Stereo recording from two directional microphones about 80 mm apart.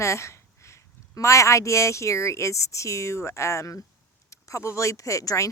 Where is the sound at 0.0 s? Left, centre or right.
Left.